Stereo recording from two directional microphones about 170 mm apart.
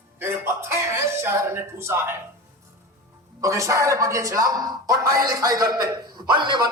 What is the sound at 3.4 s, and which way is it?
A woman's voice, 20° right (ahead or behind).